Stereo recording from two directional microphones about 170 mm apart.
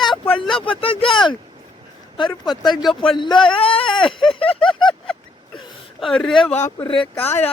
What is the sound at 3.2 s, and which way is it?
Speech, 30° left (ahead or behind).